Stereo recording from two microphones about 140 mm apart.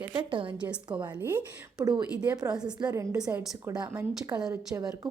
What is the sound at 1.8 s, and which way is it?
Speech, 30° right (ahead or behind).